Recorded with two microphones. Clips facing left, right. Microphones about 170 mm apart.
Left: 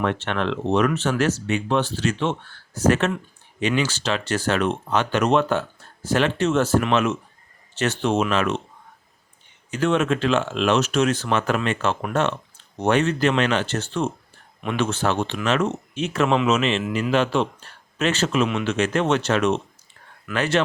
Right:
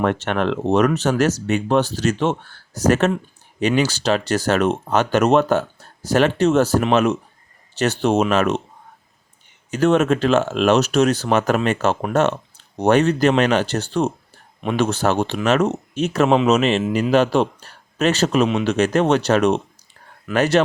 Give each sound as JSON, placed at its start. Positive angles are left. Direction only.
{"t": 0.0, "sound": "speech", "side_deg": -45}
{"t": 9.7, "sound": "speech", "side_deg": -40}